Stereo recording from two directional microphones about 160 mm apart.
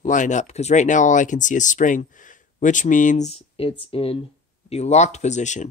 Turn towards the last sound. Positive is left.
turn(degrees=50)  # may be behind; listen again after turning